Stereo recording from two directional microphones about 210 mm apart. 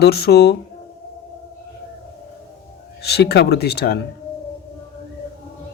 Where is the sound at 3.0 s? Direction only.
50° left (ahead or behind).